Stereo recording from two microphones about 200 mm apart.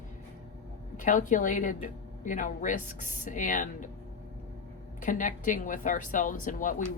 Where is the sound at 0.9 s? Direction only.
40° left (ahead or behind).